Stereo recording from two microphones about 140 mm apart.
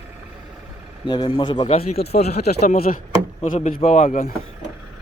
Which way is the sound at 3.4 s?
70° left (ahead or behind).